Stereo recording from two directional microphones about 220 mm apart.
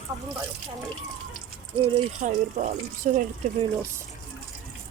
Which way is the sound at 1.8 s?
35° right (ahead or behind).